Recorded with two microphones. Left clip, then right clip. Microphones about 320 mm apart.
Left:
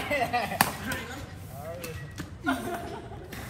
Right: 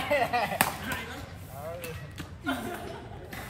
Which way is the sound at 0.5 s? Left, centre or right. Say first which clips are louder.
Left 1 dB; centre.